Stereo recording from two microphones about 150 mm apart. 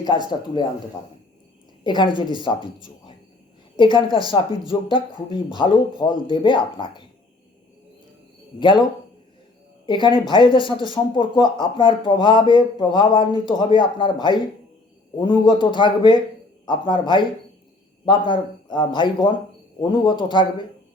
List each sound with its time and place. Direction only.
0.3 s speech: 30° left (ahead or behind)
1.8 s speech: 30° left (ahead or behind)
8.5 s speech: 30° left (ahead or behind)
9.8 s speech: 30° left (ahead or behind)